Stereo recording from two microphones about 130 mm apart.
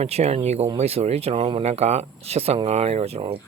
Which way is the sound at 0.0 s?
55° right (ahead or behind).